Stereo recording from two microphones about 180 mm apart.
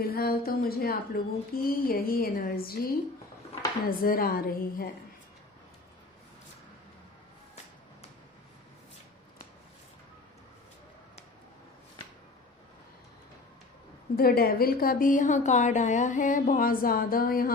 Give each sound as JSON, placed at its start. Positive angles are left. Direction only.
{"t": 0.0, "sound": "speech", "side_deg": 60}
{"t": 3.8, "sound": "speech", "side_deg": 55}
{"t": 14.2, "sound": "speech", "side_deg": 60}